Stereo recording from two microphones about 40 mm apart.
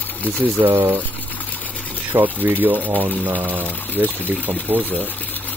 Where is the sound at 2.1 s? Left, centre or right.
Right.